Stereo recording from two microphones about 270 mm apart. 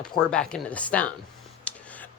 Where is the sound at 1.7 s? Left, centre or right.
Centre.